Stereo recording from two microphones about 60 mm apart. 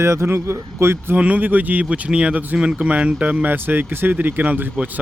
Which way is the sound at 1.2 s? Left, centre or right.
Right.